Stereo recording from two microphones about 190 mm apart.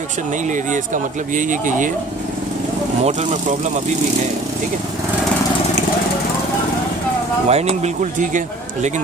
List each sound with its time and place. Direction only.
0.5 s speech: 45° right (ahead or behind)
3.0 s speech: 35° right (ahead or behind)
7.4 s speech: 35° right (ahead or behind)